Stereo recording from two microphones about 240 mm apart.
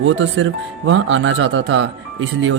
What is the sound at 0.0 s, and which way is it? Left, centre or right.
Speech, right.